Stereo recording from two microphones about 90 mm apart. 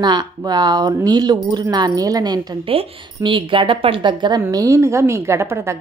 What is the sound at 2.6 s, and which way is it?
A woman's voice, 80° right.